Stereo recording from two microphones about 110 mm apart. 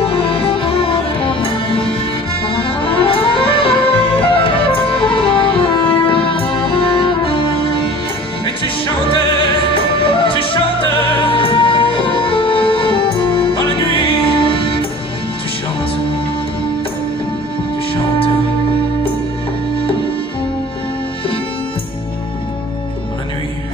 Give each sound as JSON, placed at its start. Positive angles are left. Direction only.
{"t": 0.0, "sound": "music", "side_deg": 55}
{"t": 8.5, "sound": "music", "side_deg": 50}